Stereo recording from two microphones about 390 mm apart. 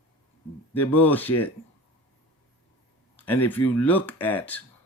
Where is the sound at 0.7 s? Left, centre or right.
Centre.